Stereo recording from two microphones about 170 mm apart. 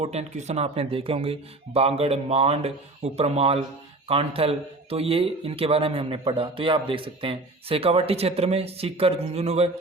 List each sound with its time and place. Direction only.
0.0 s a man's voice: 40° right (ahead or behind)